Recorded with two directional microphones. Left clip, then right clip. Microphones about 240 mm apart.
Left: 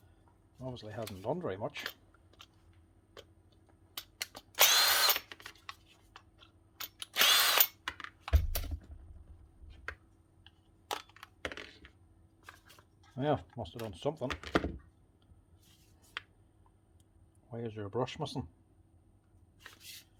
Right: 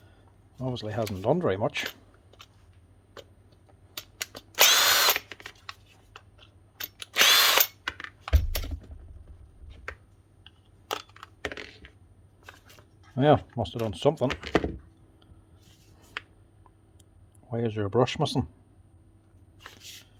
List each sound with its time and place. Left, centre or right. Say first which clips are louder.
0.5 s speech: right 11 dB; right
4.4 s drill: right 6 dB; right
7.1 s drill: right 7 dB; right
7.6 s tools: right 5 dB; centre
10.4 s computer keyboard: right 7 dB; centre
11.5 s computer keyboard: right 6 dB; centre
13.1 s speech: right 12 dB; right
14.3 s speech: right 7 dB; centre
17.5 s speech: right 12 dB; right